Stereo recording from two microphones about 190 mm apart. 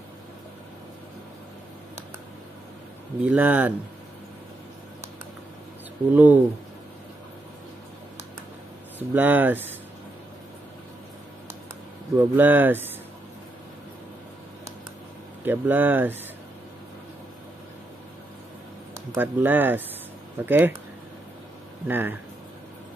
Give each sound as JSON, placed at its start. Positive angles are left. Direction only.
{"t": 3.2, "sound": "speech", "side_deg": -10}
{"t": 6.1, "sound": "speech", "side_deg": -10}
{"t": 9.1, "sound": "speech", "side_deg": -10}
{"t": 12.2, "sound": "speech", "side_deg": -10}
{"t": 15.4, "sound": "speech", "side_deg": -10}
{"t": 19.1, "sound": "speech", "side_deg": -10}
{"t": 21.8, "sound": "speech", "side_deg": -10}